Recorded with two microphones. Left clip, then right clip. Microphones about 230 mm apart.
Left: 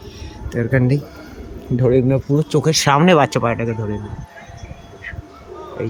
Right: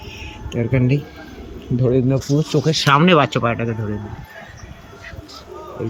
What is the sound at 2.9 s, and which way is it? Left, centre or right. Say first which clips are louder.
Speech: even; centre.